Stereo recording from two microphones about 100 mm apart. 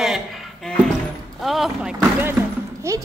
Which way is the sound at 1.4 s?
Centre (ahead or behind).